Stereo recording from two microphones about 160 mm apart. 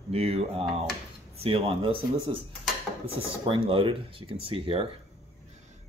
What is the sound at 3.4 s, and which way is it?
Speech, 35° right (ahead or behind).